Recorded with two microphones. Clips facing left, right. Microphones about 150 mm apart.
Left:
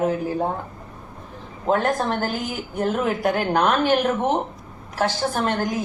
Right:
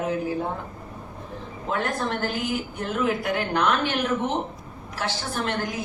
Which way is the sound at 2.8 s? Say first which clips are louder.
Left 6 dB; 45° left (ahead or behind).